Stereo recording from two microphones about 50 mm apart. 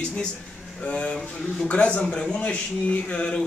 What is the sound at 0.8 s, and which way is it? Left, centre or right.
Speech, left.